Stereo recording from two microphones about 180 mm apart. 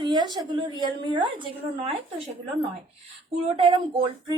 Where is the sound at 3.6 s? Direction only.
25° right (ahead or behind).